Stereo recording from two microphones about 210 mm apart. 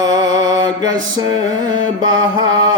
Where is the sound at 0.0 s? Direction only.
15° right (ahead or behind).